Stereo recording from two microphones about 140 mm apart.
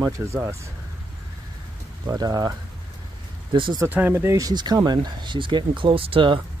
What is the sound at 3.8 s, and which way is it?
Speech, 15° right (ahead or behind).